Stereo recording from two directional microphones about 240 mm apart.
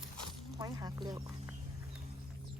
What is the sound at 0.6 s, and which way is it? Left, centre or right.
Speech, centre.